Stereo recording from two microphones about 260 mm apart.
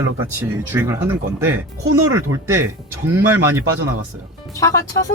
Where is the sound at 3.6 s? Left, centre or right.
Right.